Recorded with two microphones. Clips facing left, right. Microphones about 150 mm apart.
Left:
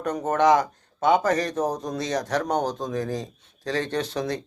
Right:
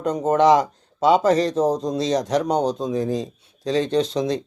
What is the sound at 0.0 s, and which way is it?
Speech, 20° right (ahead or behind).